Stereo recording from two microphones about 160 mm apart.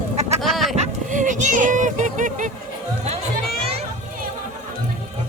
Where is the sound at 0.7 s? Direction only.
50° right (ahead or behind).